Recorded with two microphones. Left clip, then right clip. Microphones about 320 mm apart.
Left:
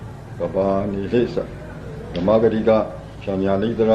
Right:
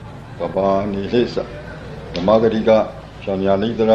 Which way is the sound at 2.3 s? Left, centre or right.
Centre.